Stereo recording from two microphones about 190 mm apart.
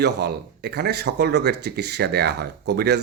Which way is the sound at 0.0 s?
60° right (ahead or behind).